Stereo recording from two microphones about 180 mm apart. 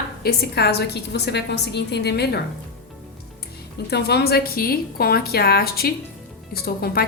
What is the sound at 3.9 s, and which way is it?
A woman's voice, 65° left (ahead or behind).